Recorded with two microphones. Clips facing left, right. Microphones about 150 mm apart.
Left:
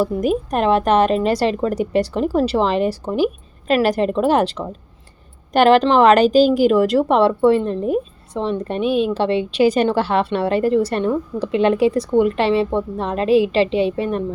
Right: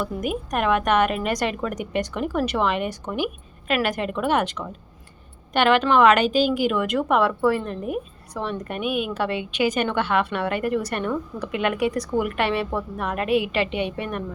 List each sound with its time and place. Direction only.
0.0 s a woman's voice: 35° left (ahead or behind)